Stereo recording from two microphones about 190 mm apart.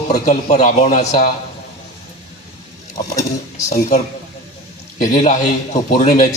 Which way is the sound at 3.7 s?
40° left (ahead or behind).